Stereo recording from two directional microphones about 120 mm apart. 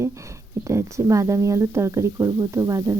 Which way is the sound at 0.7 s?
25° right (ahead or behind).